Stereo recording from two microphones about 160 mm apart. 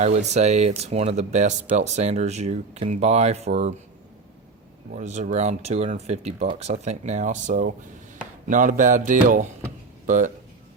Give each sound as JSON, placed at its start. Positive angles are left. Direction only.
{"t": 0.0, "sound": "speech", "side_deg": -45}
{"t": 4.9, "sound": "speech", "side_deg": -50}